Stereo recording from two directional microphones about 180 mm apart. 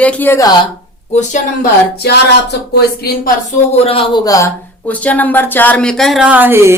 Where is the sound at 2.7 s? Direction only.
55° left (ahead or behind).